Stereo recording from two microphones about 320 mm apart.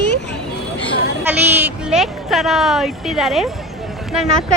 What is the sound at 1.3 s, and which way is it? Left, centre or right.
Speech, centre.